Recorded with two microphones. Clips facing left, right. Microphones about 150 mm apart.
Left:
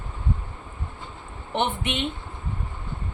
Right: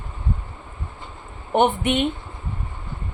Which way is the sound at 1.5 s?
45° right (ahead or behind).